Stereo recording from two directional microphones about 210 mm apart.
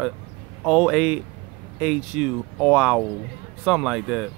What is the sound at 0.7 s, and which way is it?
Speech, 5° right (ahead or behind).